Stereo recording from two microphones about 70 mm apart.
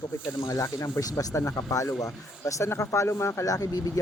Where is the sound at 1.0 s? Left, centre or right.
Left.